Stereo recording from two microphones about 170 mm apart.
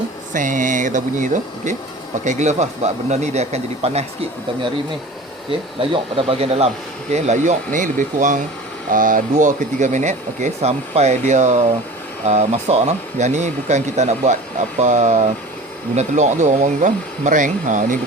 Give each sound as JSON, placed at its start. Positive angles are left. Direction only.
{"t": 0.3, "sound": "speech", "side_deg": -50}
{"t": 5.5, "sound": "speech", "side_deg": -30}